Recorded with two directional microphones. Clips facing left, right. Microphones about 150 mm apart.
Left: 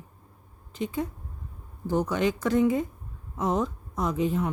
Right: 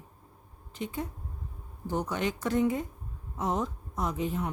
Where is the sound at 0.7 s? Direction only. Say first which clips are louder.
Left 5 dB; 90° left.